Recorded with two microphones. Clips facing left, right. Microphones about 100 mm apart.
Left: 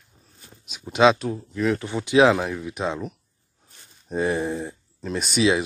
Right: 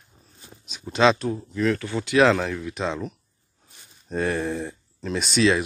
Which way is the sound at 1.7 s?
20° left (ahead or behind).